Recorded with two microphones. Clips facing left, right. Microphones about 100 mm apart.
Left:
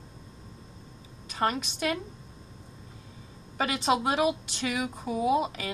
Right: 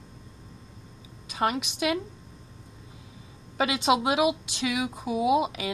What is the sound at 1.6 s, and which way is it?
Speech, 90° right.